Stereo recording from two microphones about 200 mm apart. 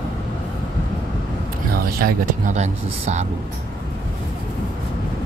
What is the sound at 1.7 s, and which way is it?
Speech, 50° right (ahead or behind).